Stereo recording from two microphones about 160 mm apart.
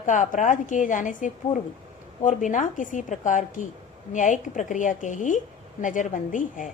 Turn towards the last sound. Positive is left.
turn(degrees=55)  # may be behind; listen again after turning